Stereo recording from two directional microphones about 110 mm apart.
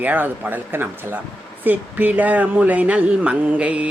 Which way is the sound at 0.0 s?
15° right (ahead or behind).